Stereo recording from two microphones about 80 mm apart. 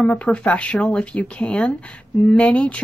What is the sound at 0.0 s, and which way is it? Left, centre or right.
Speech, centre.